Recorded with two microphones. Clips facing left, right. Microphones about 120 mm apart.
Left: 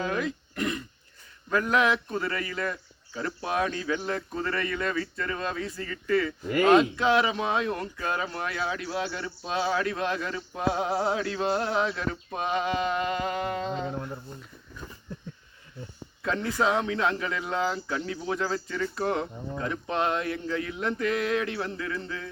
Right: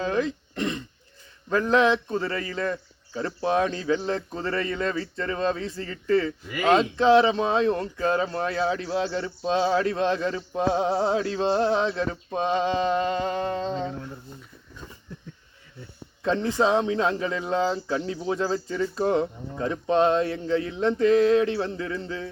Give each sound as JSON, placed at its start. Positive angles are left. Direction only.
{"t": 0.0, "sound": "speech", "side_deg": -30}
{"t": 16.2, "sound": "speech", "side_deg": -25}